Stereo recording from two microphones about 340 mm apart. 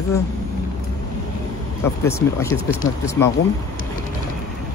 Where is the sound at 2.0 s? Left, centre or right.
Centre.